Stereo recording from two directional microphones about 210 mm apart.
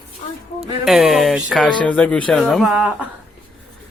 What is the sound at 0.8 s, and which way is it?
Speech, centre (ahead or behind).